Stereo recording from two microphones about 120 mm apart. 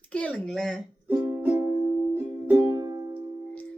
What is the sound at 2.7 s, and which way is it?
Music, 30° right (ahead or behind).